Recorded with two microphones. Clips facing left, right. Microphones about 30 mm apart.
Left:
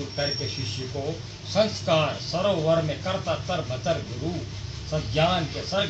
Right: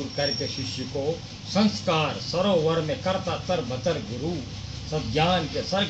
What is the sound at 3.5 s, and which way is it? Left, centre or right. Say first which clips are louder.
Speech: right 1 dB; centre.